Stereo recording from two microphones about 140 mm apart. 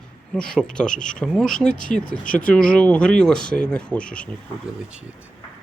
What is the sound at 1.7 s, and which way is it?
Speech, 70° left (ahead or behind).